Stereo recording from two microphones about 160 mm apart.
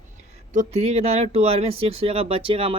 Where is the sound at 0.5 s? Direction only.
45° right (ahead or behind).